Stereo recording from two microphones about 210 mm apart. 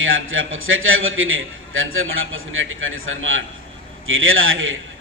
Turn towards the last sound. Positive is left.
turn(degrees=-70)  # may be behind; listen again after turning